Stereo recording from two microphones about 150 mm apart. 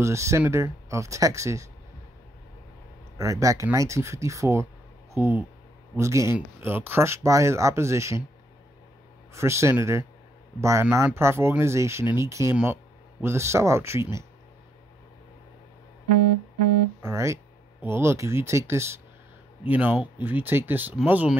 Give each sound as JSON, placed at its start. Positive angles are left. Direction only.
{"t": 0.0, "sound": "speech", "side_deg": -20}
{"t": 3.2, "sound": "speech", "side_deg": -20}
{"t": 9.3, "sound": "speech", "side_deg": -20}
{"t": 17.0, "sound": "speech", "side_deg": -20}